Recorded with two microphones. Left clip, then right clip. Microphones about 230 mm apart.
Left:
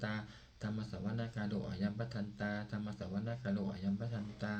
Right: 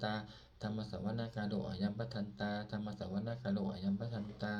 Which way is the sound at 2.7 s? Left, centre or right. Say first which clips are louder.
Right 1 dB; left.